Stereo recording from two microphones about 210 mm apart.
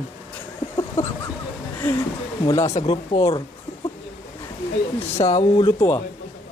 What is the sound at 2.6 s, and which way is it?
Speech, 30° left (ahead or behind).